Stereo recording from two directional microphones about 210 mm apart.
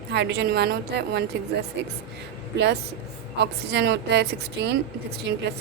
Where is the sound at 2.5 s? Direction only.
55° right (ahead or behind).